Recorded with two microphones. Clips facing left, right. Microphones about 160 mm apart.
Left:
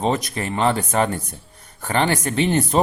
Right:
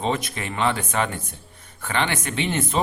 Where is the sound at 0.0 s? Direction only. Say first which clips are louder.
Left 4 dB; 40° left (ahead or behind).